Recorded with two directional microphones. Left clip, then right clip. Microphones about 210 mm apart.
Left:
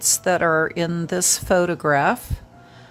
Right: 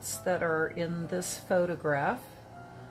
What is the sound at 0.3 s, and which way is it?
Speech, 45° left (ahead or behind).